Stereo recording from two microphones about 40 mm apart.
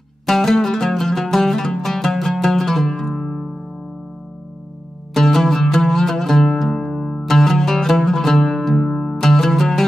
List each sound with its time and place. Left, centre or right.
0.3 s music: centre
5.1 s music: centre